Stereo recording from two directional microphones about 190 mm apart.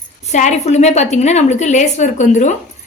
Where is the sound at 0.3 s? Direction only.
40° left (ahead or behind).